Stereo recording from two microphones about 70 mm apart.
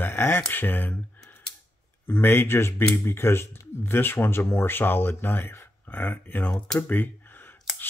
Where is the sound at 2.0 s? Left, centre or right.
Left.